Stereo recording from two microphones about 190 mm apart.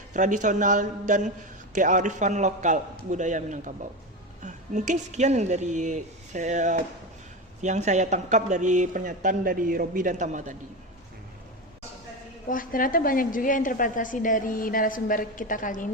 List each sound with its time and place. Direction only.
0.1 s speech: 40° right (ahead or behind)
12.5 s a woman's voice: 45° left (ahead or behind)